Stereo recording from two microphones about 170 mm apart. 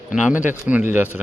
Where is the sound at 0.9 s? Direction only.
10° right (ahead or behind).